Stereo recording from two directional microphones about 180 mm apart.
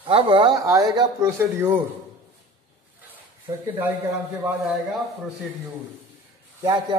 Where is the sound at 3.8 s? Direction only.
10° right (ahead or behind).